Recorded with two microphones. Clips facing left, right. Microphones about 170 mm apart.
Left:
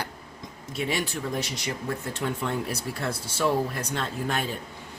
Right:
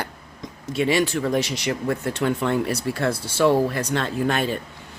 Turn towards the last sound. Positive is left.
turn(degrees=-75)  # may be behind; listen again after turning